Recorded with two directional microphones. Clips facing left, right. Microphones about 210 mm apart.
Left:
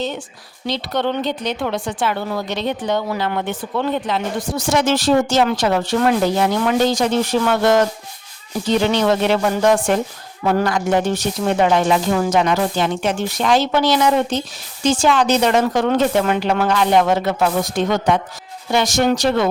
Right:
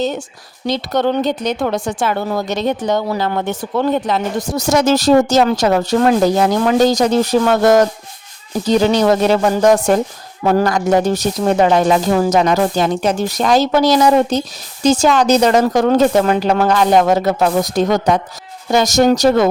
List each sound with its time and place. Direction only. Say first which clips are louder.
0.7 s speech: right 4 dB; 45° right (ahead or behind)